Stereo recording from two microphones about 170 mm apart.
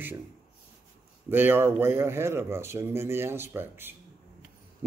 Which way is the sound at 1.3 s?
10° right (ahead or behind).